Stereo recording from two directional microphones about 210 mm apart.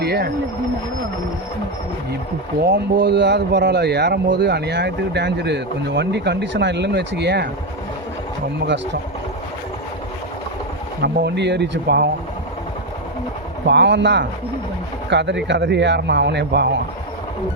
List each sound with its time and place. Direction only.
0.0 s speech: 50° right (ahead or behind)
2.6 s speech: 55° right (ahead or behind)
8.6 s a man's voice: 55° right (ahead or behind)
11.0 s speech: 55° right (ahead or behind)
13.7 s a man's voice: 55° right (ahead or behind)